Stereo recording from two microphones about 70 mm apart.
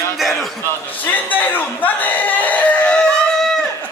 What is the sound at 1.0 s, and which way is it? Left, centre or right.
Speech, left.